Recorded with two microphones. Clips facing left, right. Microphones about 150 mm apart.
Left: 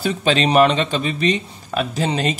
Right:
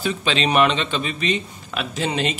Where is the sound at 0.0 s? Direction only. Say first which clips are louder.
Left 4 dB; 40° left (ahead or behind).